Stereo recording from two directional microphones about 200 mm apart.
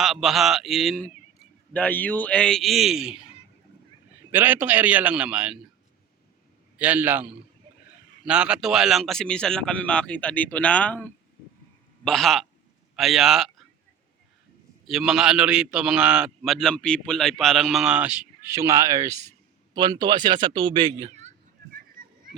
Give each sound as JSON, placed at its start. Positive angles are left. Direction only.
{"t": 0.0, "sound": "a man's voice", "side_deg": 0}
{"t": 4.3, "sound": "a man's voice", "side_deg": -10}
{"t": 6.7, "sound": "a man's voice", "side_deg": -10}
{"t": 14.8, "sound": "a man's voice", "side_deg": 0}